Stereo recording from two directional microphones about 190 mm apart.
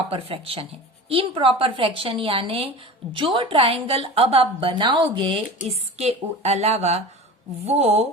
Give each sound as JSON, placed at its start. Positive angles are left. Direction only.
{"t": 0.1, "sound": "a woman's voice", "side_deg": -30}